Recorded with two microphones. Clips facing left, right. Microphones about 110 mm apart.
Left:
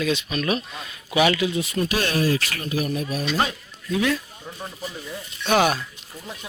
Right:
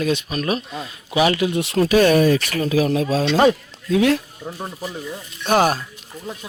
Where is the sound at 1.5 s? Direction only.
70° right (ahead or behind); by 3.4 s 85° right.